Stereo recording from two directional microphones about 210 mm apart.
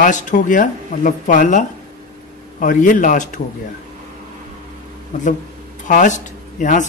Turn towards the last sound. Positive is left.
turn(degrees=35)  # may be behind; listen again after turning